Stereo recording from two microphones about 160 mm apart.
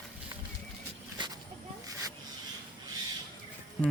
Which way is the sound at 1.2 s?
30° right (ahead or behind).